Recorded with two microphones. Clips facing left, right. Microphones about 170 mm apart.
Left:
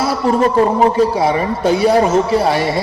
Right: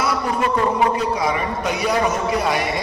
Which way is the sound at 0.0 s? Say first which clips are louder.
Left 7 dB; 30° left (ahead or behind).